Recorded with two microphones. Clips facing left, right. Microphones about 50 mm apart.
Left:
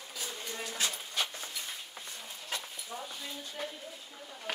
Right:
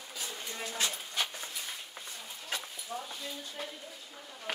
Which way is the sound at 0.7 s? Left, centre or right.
Right.